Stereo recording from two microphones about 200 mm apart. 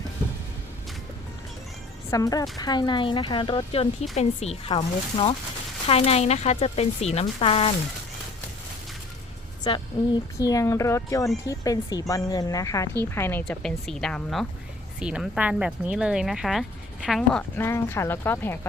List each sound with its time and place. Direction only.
2.0 s speech: 15° left (ahead or behind)
9.7 s speech: 25° left (ahead or behind)